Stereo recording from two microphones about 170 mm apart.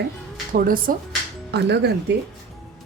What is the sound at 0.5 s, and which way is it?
Speech, 55° right (ahead or behind).